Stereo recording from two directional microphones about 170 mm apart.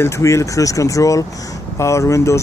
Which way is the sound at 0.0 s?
15° left (ahead or behind).